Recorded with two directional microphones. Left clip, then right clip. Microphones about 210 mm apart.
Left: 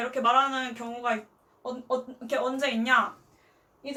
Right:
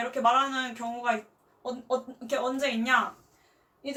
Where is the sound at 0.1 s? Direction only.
5° left (ahead or behind).